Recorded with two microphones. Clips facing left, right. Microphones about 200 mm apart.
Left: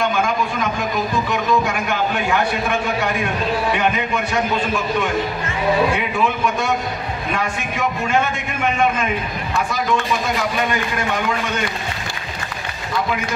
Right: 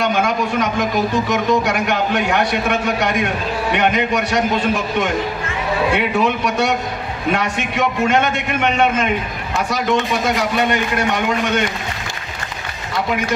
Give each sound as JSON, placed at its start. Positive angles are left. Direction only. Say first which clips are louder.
{"t": 0.0, "sound": "a man's voice", "louder": "right 2 dB", "side_deg": -75}
{"t": 5.9, "sound": "a man's voice", "louder": "right 3 dB", "side_deg": -70}
{"t": 10.2, "sound": "a man's voice", "louder": "right 3 dB", "side_deg": -75}